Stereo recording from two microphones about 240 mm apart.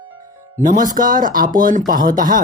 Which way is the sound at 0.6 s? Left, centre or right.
Right.